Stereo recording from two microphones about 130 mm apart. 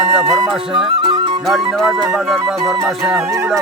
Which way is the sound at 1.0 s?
35° right (ahead or behind).